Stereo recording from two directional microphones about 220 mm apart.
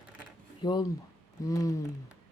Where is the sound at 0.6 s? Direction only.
20° left (ahead or behind).